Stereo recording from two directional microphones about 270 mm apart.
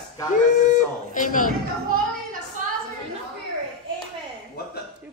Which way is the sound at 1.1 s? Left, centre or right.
Left.